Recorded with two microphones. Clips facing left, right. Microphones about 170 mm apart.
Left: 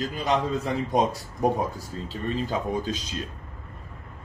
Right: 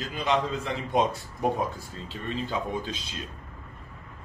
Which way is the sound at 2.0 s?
40° left (ahead or behind).